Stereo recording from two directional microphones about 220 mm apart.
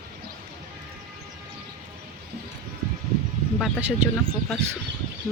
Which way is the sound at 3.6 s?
5° right (ahead or behind).